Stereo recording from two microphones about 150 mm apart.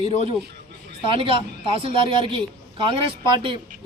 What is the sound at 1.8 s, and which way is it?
A man's voice, 35° right (ahead or behind).